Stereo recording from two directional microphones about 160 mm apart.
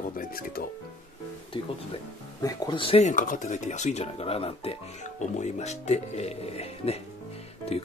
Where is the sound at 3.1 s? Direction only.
55° left (ahead or behind).